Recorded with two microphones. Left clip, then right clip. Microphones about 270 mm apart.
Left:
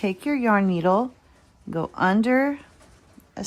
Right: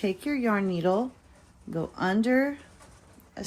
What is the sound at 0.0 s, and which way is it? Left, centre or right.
Speech, left.